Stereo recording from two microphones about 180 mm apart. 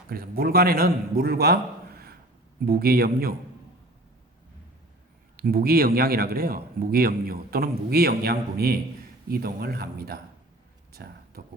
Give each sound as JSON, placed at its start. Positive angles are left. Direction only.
{"t": 0.1, "sound": "a man's voice", "side_deg": -55}
{"t": 2.6, "sound": "a man's voice", "side_deg": -55}
{"t": 5.4, "sound": "a man's voice", "side_deg": -55}
{"t": 10.9, "sound": "a sound", "side_deg": -60}